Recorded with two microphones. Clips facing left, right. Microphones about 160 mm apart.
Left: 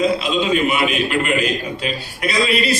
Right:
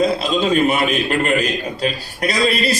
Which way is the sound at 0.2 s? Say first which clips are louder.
Right 2 dB; 40° right (ahead or behind).